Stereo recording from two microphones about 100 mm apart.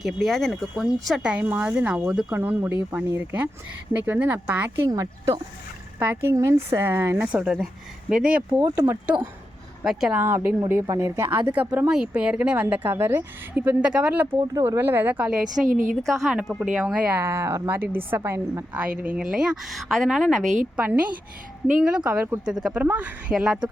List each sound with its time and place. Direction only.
0.0 s speech: centre (ahead or behind)
1.4 s a woman's voice: 15° right (ahead or behind)
4.9 s a woman's voice: 30° right (ahead or behind); by 8.6 s 10° right (ahead or behind)
8.6 s speech: 35° right (ahead or behind)
9.8 s speech: 5° right (ahead or behind)
10.2 s a woman's voice: 20° right (ahead or behind)
14.3 s speech: 40° right (ahead or behind)
14.6 s a woman's voice: 20° right (ahead or behind); by 20.5 s centre (ahead or behind)
20.7 s speech: 15° right (ahead or behind)
23.3 s speech: 5° right (ahead or behind)